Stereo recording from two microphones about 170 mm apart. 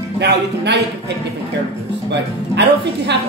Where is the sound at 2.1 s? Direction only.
90° right.